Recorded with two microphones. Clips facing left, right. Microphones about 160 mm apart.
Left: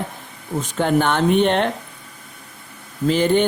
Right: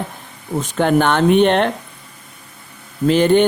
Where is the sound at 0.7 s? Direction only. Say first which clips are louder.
Right 3 dB; 75° right (ahead or behind).